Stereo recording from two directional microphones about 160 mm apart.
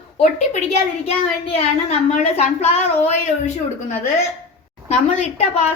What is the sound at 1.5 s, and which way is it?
A woman's voice, 40° left (ahead or behind).